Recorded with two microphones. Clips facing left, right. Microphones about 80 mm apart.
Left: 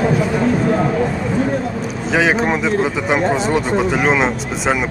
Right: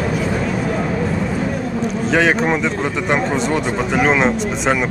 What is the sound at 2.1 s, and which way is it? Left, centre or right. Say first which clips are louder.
A man's voice: left 1 dB; centre.